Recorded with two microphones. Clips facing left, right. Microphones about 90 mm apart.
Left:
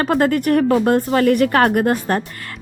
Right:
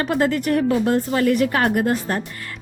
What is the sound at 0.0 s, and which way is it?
A woman's voice, 50° left (ahead or behind).